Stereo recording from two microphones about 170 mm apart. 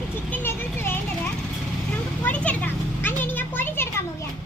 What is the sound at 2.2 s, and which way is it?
Children playing, 10° left (ahead or behind).